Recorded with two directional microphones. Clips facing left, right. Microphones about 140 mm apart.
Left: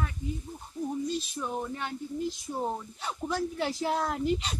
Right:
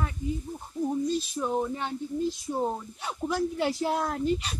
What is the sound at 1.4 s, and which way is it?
Speech, 15° right (ahead or behind).